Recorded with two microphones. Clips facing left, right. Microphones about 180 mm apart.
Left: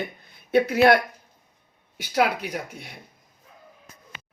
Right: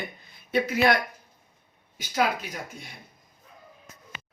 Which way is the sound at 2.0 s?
65° left (ahead or behind).